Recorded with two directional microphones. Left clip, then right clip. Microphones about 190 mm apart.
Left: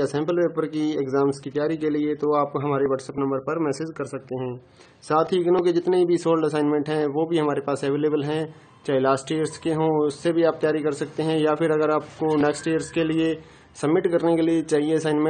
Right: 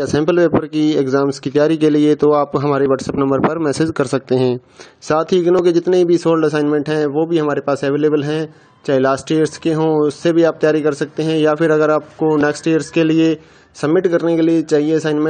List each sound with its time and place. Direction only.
0.0 s a man's voice: 40° right (ahead or behind)
5.0 s a man's voice: 35° right (ahead or behind)